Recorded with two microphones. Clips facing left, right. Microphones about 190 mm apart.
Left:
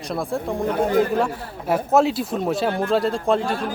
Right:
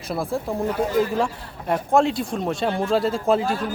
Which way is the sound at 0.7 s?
55° left (ahead or behind).